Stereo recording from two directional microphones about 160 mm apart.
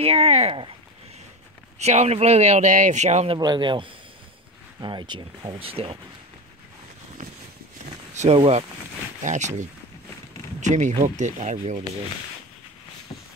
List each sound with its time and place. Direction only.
0.0 s speech: 40° right (ahead or behind)
1.8 s speech: 45° right (ahead or behind)
3.3 s a man's voice: 25° right (ahead or behind)
8.1 s a sound: 45° right (ahead or behind)
8.4 s speech: 40° right (ahead or behind)
10.6 s speech: 50° right (ahead or behind)